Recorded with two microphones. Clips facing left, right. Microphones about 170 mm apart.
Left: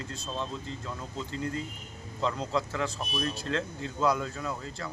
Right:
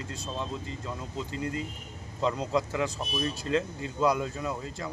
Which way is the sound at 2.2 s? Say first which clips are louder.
Right 2 dB; 10° right (ahead or behind).